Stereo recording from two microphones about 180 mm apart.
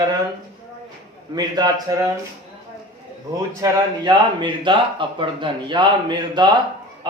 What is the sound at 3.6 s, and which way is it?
Speech, 25° right (ahead or behind).